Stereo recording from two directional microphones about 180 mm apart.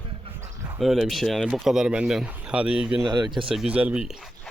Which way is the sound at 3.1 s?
25° right (ahead or behind).